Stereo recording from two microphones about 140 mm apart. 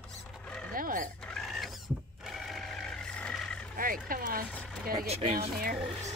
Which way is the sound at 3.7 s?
90° right.